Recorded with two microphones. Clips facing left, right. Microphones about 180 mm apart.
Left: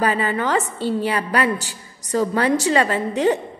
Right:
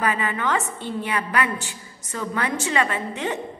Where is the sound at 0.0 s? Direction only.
35° left (ahead or behind).